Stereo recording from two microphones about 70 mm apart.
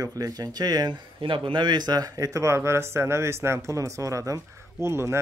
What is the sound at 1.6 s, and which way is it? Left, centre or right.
Speech, right.